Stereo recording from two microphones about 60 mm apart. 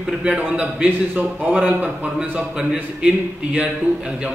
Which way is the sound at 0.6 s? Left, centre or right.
Right.